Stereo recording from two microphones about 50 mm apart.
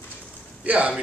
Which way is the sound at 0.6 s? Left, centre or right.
Right.